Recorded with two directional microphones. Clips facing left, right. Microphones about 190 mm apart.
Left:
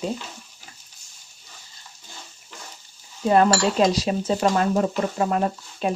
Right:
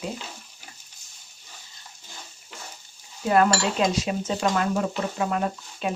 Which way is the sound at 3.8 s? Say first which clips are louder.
Left 4 dB; 35° left (ahead or behind).